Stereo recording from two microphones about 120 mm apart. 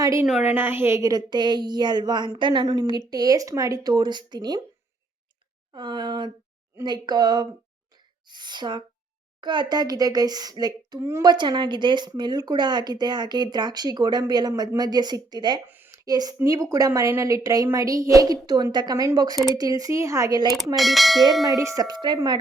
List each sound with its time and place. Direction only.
0.0 s a woman's voice: 25° right (ahead or behind)
5.7 s speech: 40° right (ahead or behind)
15.6 s a sound: 15° right (ahead or behind)
16.0 s a woman's voice: 30° right (ahead or behind)
20.7 s bell: centre (ahead or behind)
21.4 s speech: 25° right (ahead or behind)